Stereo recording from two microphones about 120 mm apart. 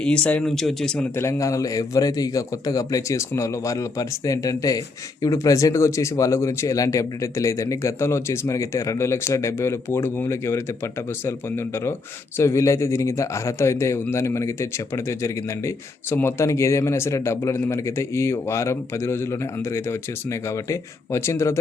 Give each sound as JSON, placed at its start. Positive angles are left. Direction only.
{"t": 0.0, "sound": "speech", "side_deg": 10}
{"t": 1.1, "sound": "a man's voice", "side_deg": 25}